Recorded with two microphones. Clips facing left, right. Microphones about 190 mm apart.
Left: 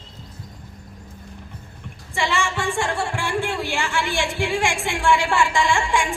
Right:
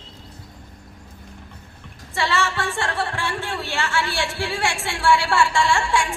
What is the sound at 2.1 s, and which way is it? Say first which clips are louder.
A woman's voice: even; 15° left (ahead or behind).